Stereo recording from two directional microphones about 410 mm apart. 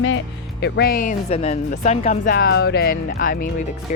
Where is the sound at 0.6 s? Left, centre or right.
Left.